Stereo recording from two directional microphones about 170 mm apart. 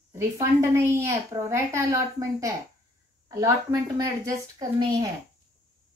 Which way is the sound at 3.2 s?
20° right (ahead or behind).